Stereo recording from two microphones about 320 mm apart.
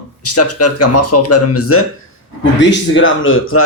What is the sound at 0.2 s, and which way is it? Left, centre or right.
A man's voice, left.